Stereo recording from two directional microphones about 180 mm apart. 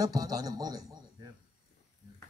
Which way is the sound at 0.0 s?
20° right (ahead or behind).